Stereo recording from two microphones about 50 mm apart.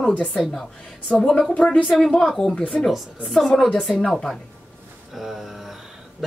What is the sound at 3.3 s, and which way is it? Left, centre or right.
A woman's voice, centre.